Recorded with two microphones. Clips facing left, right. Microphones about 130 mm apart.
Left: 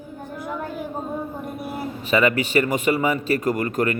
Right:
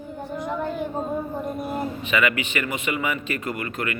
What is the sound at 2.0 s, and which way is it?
A man's voice, 35° left (ahead or behind).